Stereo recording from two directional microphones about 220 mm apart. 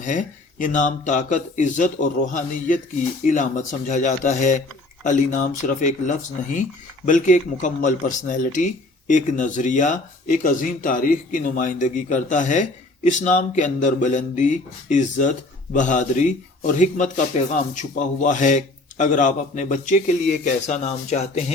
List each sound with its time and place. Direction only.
0.0 s speech: 35° left (ahead or behind)